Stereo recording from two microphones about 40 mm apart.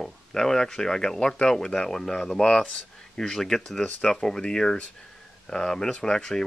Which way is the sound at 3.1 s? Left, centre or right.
Centre.